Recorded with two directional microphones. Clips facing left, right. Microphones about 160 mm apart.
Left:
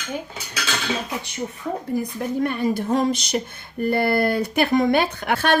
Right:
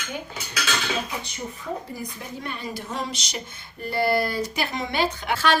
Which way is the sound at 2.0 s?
55° left (ahead or behind).